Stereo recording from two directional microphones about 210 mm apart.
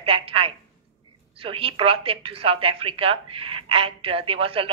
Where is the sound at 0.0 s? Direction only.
25° right (ahead or behind).